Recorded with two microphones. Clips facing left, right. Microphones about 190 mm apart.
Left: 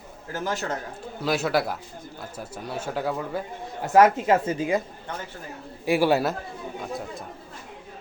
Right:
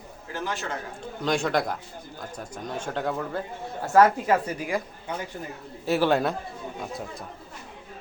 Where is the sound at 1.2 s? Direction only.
5° left (ahead or behind).